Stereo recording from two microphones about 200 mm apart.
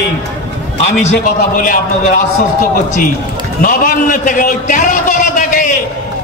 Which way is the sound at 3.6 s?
45° left (ahead or behind).